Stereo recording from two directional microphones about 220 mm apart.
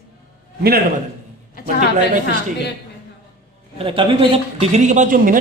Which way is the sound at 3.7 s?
25° right (ahead or behind).